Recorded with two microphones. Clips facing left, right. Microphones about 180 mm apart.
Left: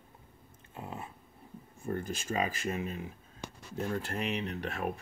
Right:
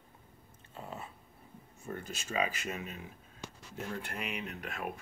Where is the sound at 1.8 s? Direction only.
50° left (ahead or behind).